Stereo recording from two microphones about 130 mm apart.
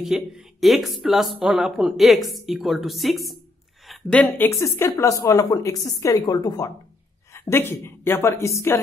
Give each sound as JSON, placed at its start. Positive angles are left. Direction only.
{"t": 0.0, "sound": "a woman's voice", "side_deg": 0}
{"t": 4.5, "sound": "a woman's voice", "side_deg": 25}
{"t": 7.3, "sound": "a woman's voice", "side_deg": 20}